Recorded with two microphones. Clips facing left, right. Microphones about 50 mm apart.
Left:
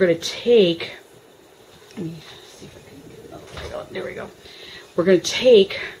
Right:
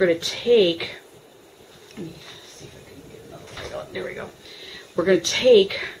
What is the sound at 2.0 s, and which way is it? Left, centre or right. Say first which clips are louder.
Speech: left 5 dB; centre.